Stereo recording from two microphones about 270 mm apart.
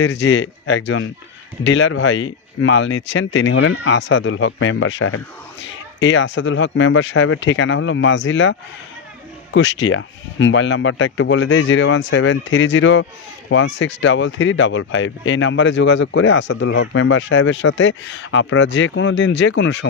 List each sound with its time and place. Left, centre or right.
0.0 s speech: left